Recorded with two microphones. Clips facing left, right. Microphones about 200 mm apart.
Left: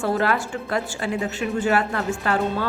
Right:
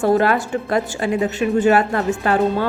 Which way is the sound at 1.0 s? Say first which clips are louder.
Right 6 dB; 20° right (ahead or behind).